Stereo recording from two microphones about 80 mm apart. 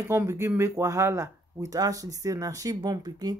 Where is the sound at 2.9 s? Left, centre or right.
Right.